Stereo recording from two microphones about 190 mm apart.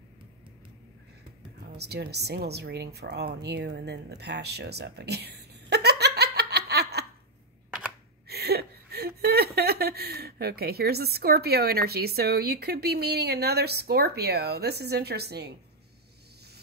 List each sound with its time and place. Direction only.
1.8 s a woman's voice: 60° right (ahead or behind)
8.3 s speech: 60° right (ahead or behind)